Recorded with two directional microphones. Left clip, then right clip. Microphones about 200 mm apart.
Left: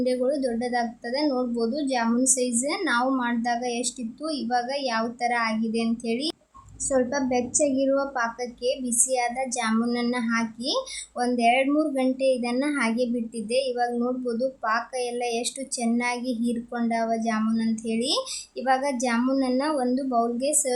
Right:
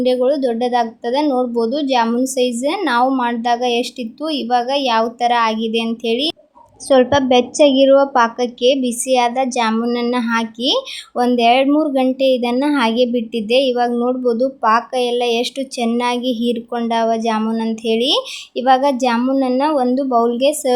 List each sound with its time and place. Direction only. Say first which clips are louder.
0.0 s a woman's voice: right 9 dB; 25° right (ahead or behind)